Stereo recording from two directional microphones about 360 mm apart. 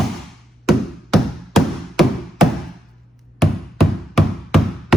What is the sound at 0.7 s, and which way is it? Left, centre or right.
Music, centre.